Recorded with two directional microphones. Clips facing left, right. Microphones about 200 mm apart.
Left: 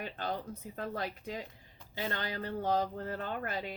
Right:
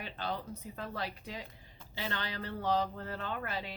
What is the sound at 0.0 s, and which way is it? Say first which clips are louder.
Speech: left 2 dB; 45° left (ahead or behind).